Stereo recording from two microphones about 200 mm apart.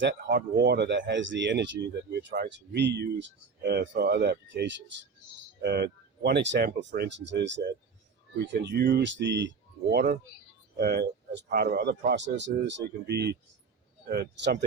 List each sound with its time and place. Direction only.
0.0 s speech: 55° right (ahead or behind)
8.6 s speech: 55° right (ahead or behind)
9.9 s speech: 50° right (ahead or behind)